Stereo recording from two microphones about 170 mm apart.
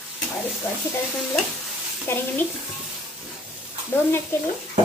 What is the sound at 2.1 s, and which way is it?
Speech, 15° left (ahead or behind).